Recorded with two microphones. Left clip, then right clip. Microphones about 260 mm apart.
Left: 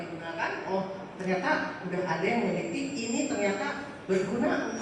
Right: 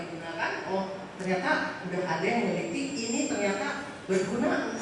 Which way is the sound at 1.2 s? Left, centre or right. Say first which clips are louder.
Even; centre.